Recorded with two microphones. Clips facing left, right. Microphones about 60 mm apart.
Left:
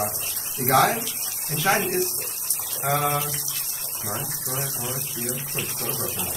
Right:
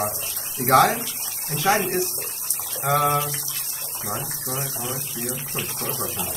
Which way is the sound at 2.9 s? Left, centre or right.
Right.